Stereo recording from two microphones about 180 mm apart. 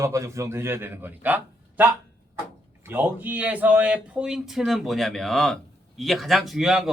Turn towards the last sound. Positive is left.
turn(degrees=0)  # may be behind; listen again after turning